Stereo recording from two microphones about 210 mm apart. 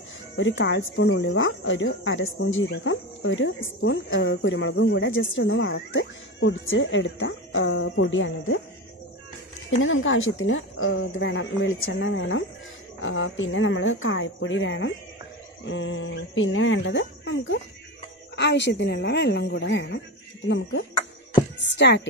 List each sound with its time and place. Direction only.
0.4 s speech: 65° left (ahead or behind)
9.8 s a woman's voice: 70° left (ahead or behind)